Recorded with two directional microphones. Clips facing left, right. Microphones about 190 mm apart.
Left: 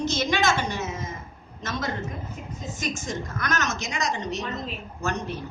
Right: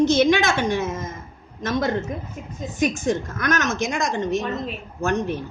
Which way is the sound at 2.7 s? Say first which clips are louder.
Right 10 dB; 60° right (ahead or behind).